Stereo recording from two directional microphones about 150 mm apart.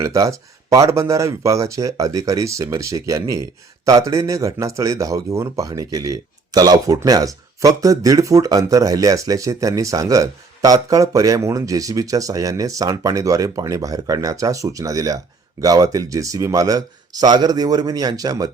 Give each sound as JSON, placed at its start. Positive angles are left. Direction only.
{"t": 0.0, "sound": "speech", "side_deg": -20}